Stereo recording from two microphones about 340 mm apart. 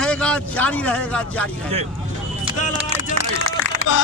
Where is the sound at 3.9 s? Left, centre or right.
Left.